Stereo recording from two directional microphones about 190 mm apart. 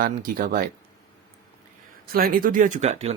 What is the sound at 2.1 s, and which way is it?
Speech, 50° right (ahead or behind).